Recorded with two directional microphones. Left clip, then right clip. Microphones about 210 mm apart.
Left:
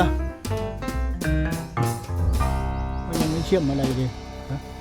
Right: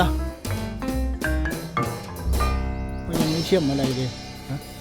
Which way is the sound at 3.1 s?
Centre (ahead or behind).